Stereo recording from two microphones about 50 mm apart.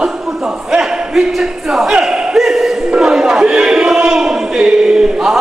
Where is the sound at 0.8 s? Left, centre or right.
Centre.